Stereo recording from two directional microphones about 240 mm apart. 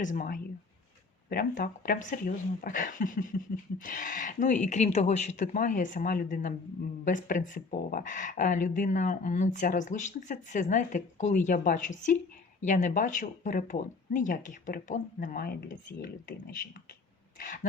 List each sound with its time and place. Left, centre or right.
0.0 s speech: left
17.4 s speech: left